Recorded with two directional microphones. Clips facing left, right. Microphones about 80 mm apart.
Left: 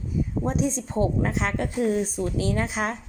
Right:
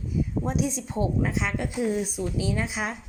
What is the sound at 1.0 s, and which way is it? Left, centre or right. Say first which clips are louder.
Speech: left 2 dB; left.